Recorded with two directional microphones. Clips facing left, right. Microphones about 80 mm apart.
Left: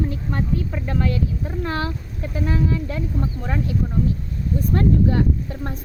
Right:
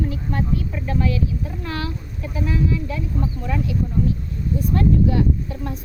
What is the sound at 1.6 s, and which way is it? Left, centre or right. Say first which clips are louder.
Speech: left 3 dB; left.